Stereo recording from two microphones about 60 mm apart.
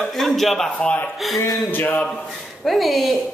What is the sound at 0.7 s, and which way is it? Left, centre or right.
A man's voice, left.